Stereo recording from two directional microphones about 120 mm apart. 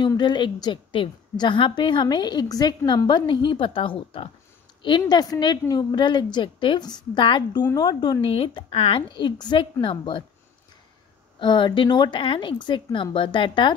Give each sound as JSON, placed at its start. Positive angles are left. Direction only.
{"t": 0.0, "sound": "a woman's voice", "side_deg": 40}
{"t": 8.2, "sound": "speech", "side_deg": 50}
{"t": 11.3, "sound": "speech", "side_deg": 40}